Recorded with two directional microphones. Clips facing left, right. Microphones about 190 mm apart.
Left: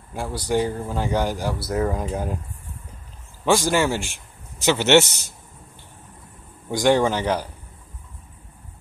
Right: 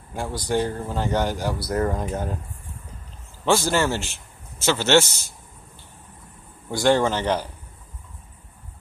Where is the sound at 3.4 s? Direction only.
10° left (ahead or behind).